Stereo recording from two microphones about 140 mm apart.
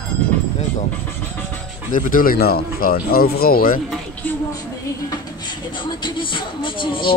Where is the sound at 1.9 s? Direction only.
75° left (ahead or behind); by 3.8 s 90° left.